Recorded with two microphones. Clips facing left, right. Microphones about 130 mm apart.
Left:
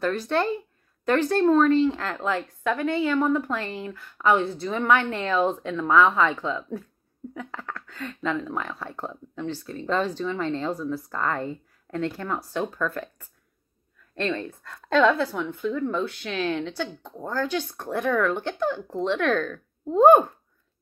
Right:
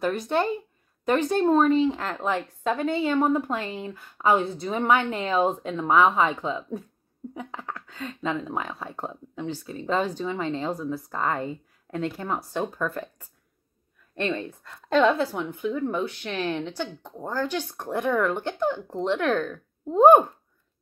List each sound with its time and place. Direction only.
0.0 s a woman's voice: 15° right (ahead or behind)
9.7 s a woman's voice: 10° right (ahead or behind)
10.7 s a woman's voice: 20° right (ahead or behind)